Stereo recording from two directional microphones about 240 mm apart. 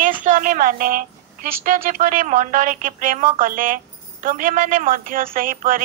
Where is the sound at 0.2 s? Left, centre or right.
Right.